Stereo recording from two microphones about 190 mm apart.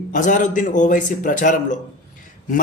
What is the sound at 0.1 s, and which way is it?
Speech, 45° left (ahead or behind).